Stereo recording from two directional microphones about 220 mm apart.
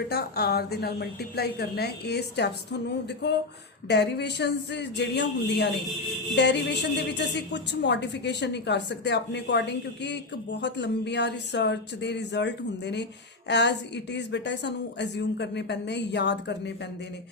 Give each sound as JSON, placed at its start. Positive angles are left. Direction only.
{"t": 0.1, "sound": "a woman's voice", "side_deg": 45}